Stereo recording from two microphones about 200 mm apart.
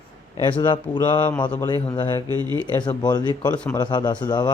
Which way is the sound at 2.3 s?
20° right (ahead or behind).